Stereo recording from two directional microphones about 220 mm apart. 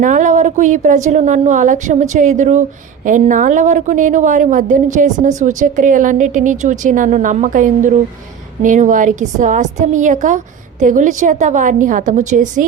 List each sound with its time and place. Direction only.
0.0 s a woman's voice: 35° right (ahead or behind)